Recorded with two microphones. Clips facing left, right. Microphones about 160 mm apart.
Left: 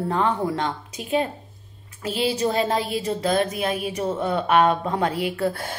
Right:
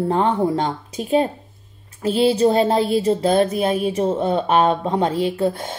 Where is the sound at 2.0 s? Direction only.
35° right (ahead or behind).